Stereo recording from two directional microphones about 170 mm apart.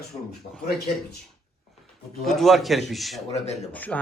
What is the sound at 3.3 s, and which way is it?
Speech, 40° left (ahead or behind).